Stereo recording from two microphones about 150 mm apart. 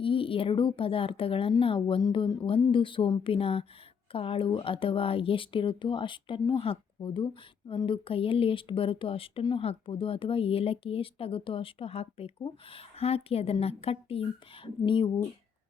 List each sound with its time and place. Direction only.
0.0 s speech: 35° left (ahead or behind)